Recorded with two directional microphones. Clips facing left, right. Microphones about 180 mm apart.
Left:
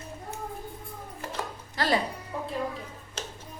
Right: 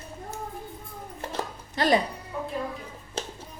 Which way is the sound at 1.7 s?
20° right (ahead or behind).